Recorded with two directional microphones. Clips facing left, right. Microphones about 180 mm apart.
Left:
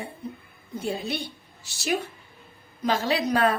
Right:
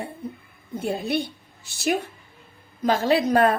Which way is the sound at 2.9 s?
50° right (ahead or behind).